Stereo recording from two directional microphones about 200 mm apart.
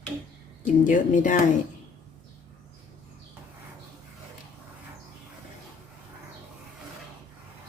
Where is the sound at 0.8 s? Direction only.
40° left (ahead or behind).